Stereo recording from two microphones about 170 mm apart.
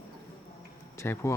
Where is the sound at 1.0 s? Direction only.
15° left (ahead or behind).